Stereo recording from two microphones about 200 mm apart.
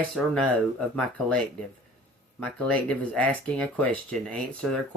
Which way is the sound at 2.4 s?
5° left (ahead or behind).